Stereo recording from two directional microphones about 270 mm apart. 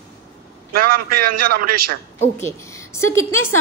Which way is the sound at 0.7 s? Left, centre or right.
Right.